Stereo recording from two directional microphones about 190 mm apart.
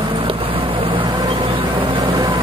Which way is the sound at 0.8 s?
25° right (ahead or behind).